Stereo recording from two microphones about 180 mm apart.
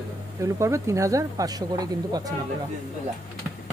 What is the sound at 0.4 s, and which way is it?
Speech, 15° right (ahead or behind).